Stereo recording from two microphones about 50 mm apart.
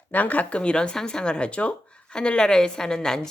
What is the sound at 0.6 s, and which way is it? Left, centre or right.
Speech, centre.